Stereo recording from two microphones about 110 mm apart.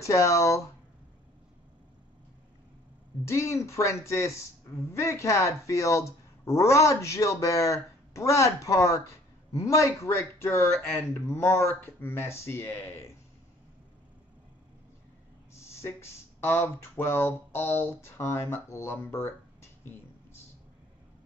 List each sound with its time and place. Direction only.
0.0 s a woman's voice: 30° left (ahead or behind)
3.3 s a woman's voice: 25° left (ahead or behind)
15.6 s speech: 25° left (ahead or behind)